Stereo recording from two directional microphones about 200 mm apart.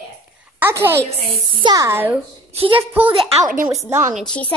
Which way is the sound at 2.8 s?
10° right (ahead or behind).